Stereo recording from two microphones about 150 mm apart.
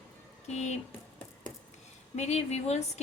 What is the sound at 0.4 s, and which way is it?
Speech, 50° left (ahead or behind).